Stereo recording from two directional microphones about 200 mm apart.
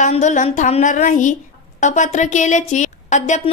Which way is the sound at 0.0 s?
35° left (ahead or behind).